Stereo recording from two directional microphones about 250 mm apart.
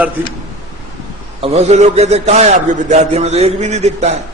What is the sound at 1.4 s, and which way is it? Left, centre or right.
A man's voice, right.